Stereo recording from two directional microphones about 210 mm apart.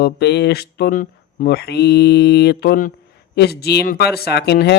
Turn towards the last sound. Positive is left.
turn(degrees=50)  # may be behind; listen again after turning